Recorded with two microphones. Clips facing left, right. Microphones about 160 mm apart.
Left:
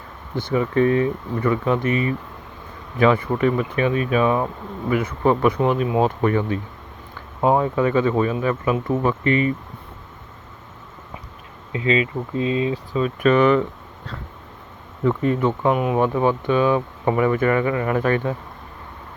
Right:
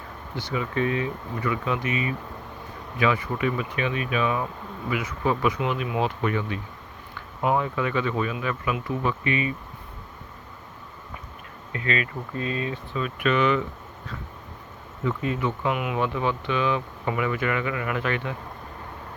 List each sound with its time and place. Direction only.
0.3 s speech: 50° left (ahead or behind)
4.9 s speech: 50° left (ahead or behind)
5.5 s speech: 35° left (ahead or behind)
11.7 s speech: 25° left (ahead or behind)
12.9 s speech: 35° left (ahead or behind)
13.3 s speech: 50° left (ahead or behind)
15.0 s speech: 60° left (ahead or behind)
15.6 s speech: 35° left (ahead or behind)